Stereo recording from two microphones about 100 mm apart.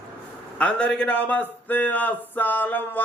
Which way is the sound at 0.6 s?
10° left (ahead or behind).